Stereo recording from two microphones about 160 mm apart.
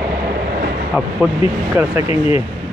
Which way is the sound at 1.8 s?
15° right (ahead or behind).